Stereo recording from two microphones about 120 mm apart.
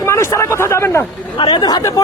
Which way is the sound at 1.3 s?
40° left (ahead or behind).